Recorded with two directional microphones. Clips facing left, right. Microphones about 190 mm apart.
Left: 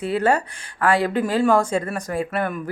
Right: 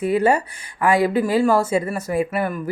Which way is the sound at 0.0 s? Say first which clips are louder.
Right 2 dB; 10° right (ahead or behind).